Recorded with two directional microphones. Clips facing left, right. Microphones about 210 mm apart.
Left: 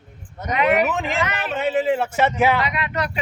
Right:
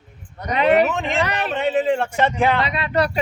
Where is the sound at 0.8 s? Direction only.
Centre (ahead or behind).